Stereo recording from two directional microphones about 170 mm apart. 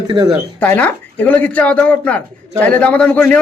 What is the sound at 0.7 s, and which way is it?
Speech, 10° left (ahead or behind).